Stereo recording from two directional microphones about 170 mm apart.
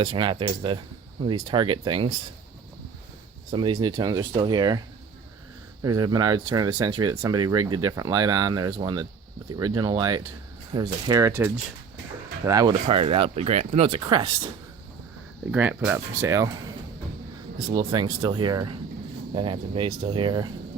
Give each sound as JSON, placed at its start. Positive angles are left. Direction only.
{"t": 0.0, "sound": "speech", "side_deg": -30}
{"t": 3.5, "sound": "speech", "side_deg": -30}
{"t": 5.8, "sound": "speech", "side_deg": -25}
{"t": 12.5, "sound": "speech", "side_deg": -20}
{"t": 12.9, "sound": "speech", "side_deg": -35}
{"t": 14.0, "sound": "speech", "side_deg": -25}
{"t": 15.5, "sound": "speech", "side_deg": -10}
{"t": 17.7, "sound": "speech", "side_deg": -25}